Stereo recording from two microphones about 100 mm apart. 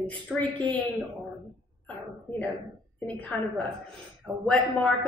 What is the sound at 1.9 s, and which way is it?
A woman's voice, 15° left (ahead or behind).